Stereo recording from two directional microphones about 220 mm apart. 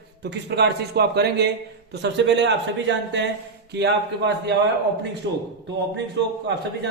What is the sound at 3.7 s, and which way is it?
Speech, 50° right (ahead or behind).